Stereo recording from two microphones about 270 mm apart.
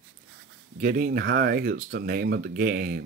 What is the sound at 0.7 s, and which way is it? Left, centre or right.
Speech, right.